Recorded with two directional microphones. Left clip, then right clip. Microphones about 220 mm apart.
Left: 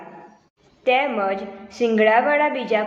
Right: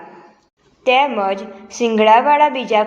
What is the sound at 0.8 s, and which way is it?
A woman's voice, 25° right (ahead or behind).